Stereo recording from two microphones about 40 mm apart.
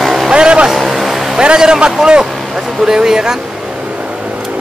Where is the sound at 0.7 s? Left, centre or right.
Centre.